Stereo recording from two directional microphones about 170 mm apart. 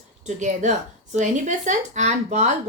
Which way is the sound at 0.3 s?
45° right (ahead or behind).